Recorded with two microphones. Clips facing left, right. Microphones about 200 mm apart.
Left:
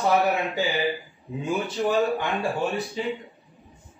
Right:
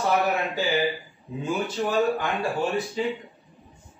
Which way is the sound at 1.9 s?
Centre (ahead or behind).